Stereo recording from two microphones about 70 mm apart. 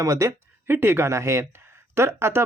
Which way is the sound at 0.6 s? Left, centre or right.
Right.